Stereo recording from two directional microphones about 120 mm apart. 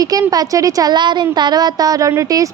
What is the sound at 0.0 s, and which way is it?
Speech, 30° right (ahead or behind).